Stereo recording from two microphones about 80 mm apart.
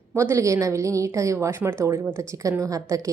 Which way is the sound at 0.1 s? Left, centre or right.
Right.